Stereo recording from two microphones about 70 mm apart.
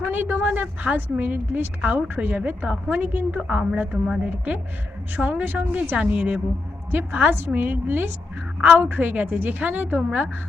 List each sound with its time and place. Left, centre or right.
0.1 s a woman's voice: right; by 4.2 s centre
4.2 s a woman's voice: right